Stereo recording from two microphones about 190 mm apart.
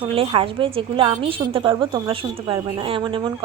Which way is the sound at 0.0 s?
30° right (ahead or behind).